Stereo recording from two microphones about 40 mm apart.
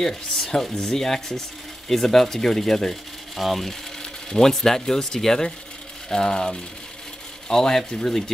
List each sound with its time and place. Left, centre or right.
0.0 s speech: centre
4.0 s ratchet: centre
4.5 s speech: centre